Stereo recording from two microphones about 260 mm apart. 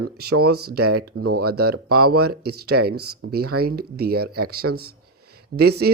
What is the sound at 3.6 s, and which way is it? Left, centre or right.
Speech, right.